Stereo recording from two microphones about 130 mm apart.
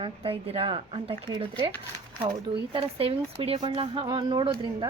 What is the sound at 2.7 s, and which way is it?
A woman's voice, 45° right (ahead or behind).